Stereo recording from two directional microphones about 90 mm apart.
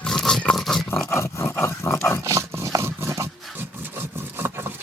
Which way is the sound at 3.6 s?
25° right (ahead or behind).